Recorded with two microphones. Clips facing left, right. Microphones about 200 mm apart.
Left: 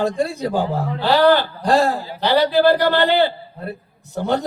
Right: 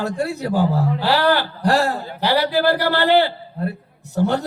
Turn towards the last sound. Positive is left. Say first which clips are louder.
# right 1 dB
turn(degrees=20)  # may be behind; listen again after turning